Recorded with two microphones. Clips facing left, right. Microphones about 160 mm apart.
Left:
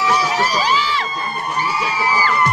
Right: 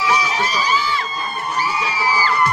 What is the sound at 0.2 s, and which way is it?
Crowd, 75° left (ahead or behind).